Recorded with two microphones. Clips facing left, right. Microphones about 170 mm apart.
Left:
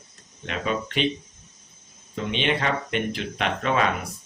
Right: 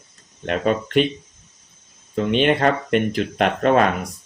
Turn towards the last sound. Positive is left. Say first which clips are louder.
# right 7 dB
turn(degrees=-50)  # may be behind; listen again after turning